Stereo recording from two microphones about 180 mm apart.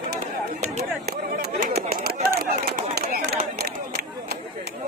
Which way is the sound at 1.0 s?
60° right (ahead or behind).